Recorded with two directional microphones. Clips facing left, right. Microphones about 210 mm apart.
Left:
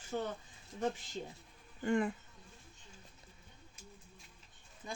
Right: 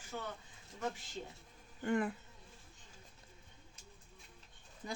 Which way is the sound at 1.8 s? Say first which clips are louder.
Left 2 dB; centre (ahead or behind).